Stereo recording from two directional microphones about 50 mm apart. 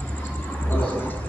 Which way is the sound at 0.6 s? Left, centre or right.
Left.